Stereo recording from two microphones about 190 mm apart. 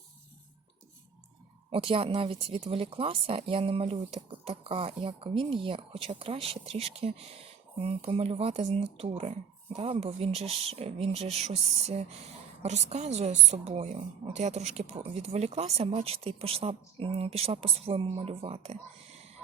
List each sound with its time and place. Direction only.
1.7 s a woman's voice: 30° right (ahead or behind)